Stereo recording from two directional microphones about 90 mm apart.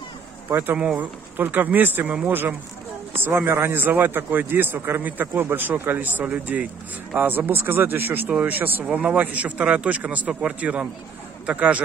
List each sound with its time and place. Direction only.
0.5 s a man's voice: 20° right (ahead or behind)
0.7 s a man's voice: 10° right (ahead or behind)